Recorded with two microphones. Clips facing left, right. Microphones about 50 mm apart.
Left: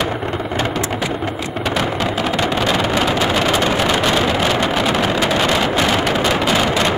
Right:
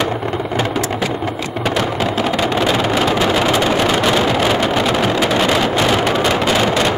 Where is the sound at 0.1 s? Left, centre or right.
Centre.